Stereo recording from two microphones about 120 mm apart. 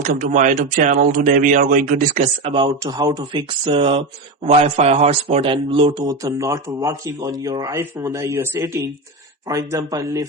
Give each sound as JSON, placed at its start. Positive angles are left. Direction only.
{"t": 0.0, "sound": "speech", "side_deg": -90}
{"t": 2.5, "sound": "speech", "side_deg": -40}
{"t": 3.7, "sound": "speech", "side_deg": -50}
{"t": 4.4, "sound": "a man's voice", "side_deg": -60}
{"t": 5.4, "sound": "speech", "side_deg": -50}